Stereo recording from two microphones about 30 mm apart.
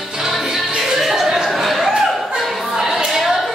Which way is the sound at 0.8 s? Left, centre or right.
Centre.